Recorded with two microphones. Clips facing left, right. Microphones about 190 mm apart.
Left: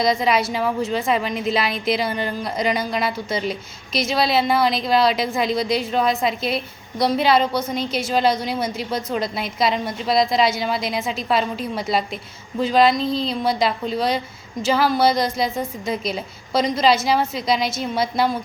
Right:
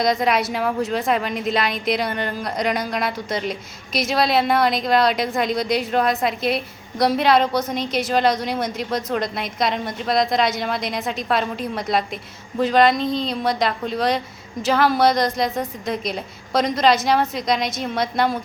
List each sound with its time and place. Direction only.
0.0 s a woman's voice: centre (ahead or behind)